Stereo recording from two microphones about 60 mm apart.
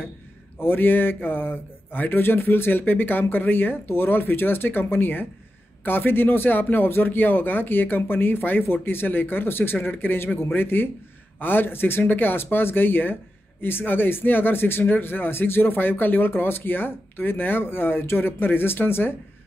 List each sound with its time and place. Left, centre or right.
0.6 s speech: left